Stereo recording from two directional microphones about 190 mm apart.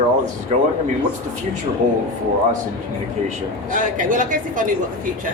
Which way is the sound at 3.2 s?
45° right (ahead or behind).